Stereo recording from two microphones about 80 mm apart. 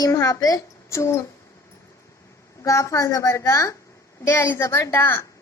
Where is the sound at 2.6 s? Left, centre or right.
Left.